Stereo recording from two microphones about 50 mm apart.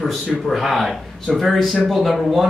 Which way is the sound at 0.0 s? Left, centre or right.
Centre.